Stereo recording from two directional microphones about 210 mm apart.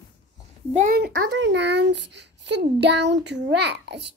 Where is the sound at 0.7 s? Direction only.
40° right (ahead or behind).